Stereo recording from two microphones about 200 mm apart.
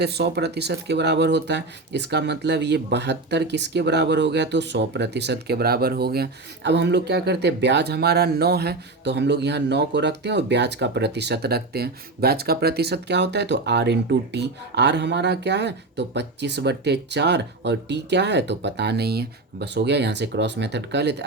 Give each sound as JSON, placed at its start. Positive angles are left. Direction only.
{"t": 0.0, "sound": "speech", "side_deg": -55}